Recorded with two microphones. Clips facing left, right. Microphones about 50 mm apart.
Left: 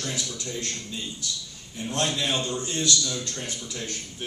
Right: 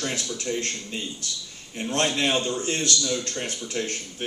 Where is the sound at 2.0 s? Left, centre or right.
Right.